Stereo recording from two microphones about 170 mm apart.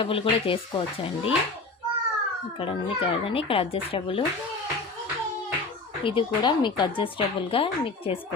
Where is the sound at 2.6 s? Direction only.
30° left (ahead or behind).